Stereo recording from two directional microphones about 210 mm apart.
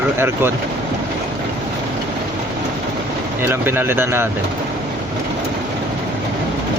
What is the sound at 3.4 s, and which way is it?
Speech, 10° right (ahead or behind).